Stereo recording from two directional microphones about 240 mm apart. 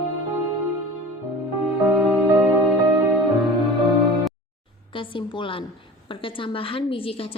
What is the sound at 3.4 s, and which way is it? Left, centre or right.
Music, centre.